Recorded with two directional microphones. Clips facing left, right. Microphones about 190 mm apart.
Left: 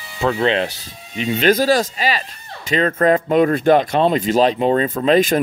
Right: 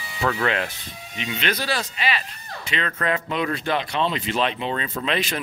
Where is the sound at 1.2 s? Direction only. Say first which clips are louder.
Left 11 dB; 40° left (ahead or behind).